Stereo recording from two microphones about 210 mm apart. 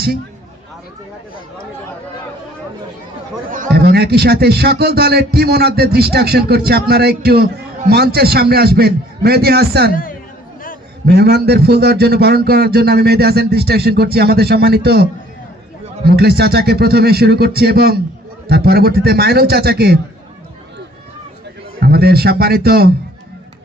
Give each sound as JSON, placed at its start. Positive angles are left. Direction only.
{"t": 3.5, "sound": "a man's voice", "side_deg": -45}
{"t": 9.9, "sound": "a woman's voice", "side_deg": 40}
{"t": 11.0, "sound": "a man's voice", "side_deg": -50}
{"t": 21.8, "sound": "a man's voice", "side_deg": -50}